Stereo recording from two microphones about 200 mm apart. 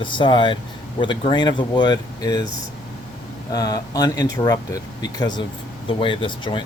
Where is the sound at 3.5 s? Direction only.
20° left (ahead or behind).